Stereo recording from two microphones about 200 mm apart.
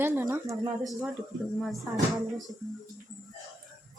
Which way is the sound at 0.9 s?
5° right (ahead or behind).